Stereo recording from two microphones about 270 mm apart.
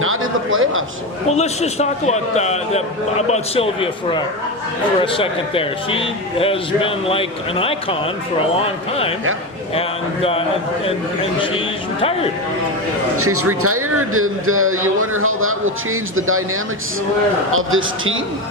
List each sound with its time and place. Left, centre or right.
0.0 s a sound: right
1.3 s a man's voice: left
10.8 s a man's voice: centre
13.1 s speech: right
17.5 s speech: right